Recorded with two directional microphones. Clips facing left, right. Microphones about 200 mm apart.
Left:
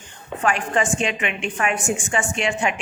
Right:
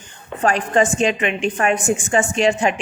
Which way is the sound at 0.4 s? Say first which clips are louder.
Right 5 dB; 40° right (ahead or behind).